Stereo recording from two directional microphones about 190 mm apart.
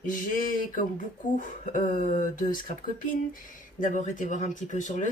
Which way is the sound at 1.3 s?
45° left (ahead or behind).